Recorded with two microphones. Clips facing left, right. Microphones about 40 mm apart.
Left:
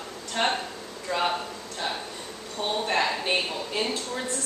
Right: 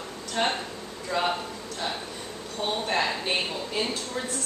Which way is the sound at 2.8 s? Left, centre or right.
Centre.